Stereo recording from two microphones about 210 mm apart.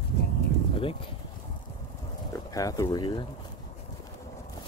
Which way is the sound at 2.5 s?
15° left (ahead or behind).